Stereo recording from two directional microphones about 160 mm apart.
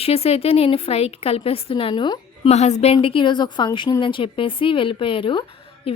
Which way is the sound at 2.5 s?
45° left (ahead or behind).